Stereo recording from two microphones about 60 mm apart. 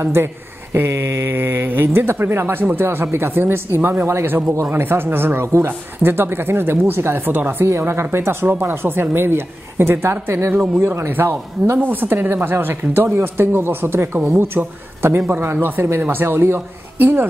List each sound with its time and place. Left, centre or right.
0.0 s speech: right
5.7 s speech: right
7.7 s speech: right
15.2 s speech: right